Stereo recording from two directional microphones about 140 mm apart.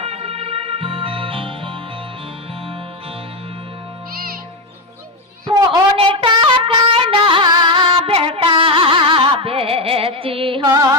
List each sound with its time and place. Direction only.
0.0 s music: 45° right (ahead or behind)
4.1 s music: 90° right
5.5 s a sound: 30° right (ahead or behind)
6.0 s music: 40° right (ahead or behind)